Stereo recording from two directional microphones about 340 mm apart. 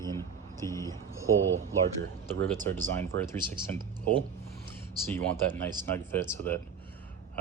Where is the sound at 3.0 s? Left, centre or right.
Centre.